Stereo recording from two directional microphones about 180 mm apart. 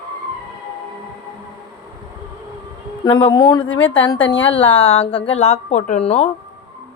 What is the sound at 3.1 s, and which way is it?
A woman's voice, 25° left (ahead or behind).